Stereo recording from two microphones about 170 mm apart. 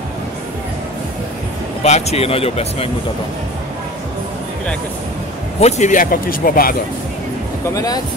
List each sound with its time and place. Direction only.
1.8 s speech: 40° left (ahead or behind)
5.6 s speech: 40° left (ahead or behind)
7.7 s speech: 20° left (ahead or behind)